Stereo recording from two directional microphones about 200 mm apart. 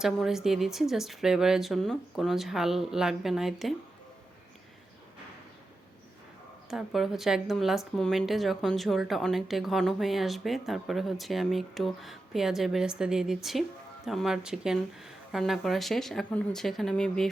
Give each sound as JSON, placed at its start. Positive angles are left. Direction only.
{"t": 0.0, "sound": "a woman's voice", "side_deg": 0}
{"t": 6.7, "sound": "a woman's voice", "side_deg": 0}